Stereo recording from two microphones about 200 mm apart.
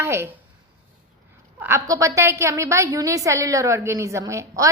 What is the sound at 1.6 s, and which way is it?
A woman's voice, 15° right (ahead or behind).